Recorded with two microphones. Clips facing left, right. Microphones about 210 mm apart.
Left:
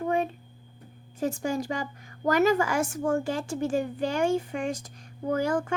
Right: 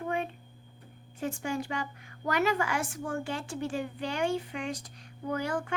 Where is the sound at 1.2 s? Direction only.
40° left (ahead or behind).